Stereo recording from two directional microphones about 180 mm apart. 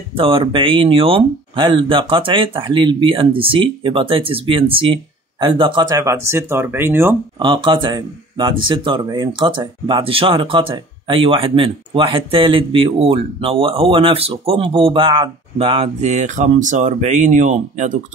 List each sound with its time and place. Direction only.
0.1 s speech: 30° right (ahead or behind); by 7.2 s 10° right (ahead or behind)
7.3 s speech: 25° right (ahead or behind); by 17.9 s 40° right (ahead or behind)